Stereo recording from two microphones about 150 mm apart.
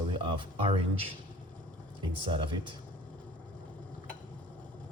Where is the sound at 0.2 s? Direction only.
35° right (ahead or behind).